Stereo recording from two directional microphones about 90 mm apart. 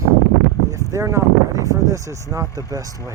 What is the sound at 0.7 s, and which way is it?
Speech, 35° right (ahead or behind).